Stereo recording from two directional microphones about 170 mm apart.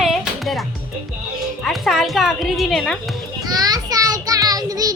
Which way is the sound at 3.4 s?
20° right (ahead or behind).